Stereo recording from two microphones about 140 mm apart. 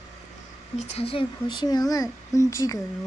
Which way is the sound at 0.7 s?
55° left (ahead or behind).